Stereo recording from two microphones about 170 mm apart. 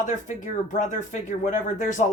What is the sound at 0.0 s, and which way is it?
Speech, 50° left (ahead or behind).